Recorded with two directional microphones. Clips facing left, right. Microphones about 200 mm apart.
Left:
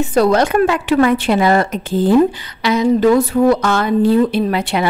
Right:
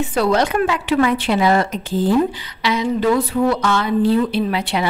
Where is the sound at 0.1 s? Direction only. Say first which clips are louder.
Left 5 dB; 45° left (ahead or behind).